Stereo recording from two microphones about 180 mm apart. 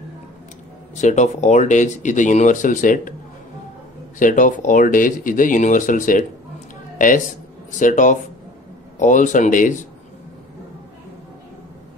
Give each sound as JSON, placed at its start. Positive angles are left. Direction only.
{"t": 0.9, "sound": "speech", "side_deg": 40}
{"t": 4.2, "sound": "speech", "side_deg": 45}
{"t": 7.8, "sound": "speech", "side_deg": 45}